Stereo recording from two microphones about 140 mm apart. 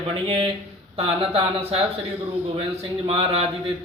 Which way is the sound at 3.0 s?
40° right (ahead or behind).